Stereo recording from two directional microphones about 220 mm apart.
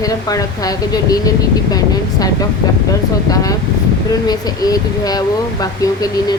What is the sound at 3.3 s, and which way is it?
Speech, 15° left (ahead or behind).